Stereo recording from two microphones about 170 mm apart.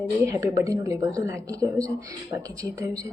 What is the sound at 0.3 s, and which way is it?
A woman's voice, 20° right (ahead or behind).